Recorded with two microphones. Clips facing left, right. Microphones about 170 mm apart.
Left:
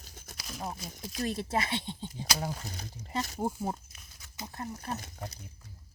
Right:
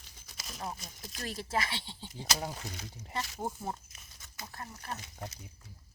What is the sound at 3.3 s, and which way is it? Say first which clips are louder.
Speech: left 6 dB; 20° left (ahead or behind).